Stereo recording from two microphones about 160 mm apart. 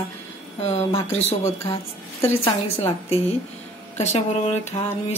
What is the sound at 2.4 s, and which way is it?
A woman's voice, 40° left (ahead or behind).